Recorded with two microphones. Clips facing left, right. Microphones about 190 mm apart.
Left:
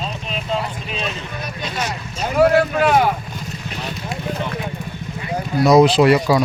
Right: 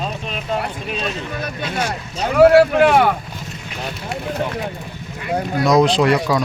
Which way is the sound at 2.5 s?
70° right (ahead or behind).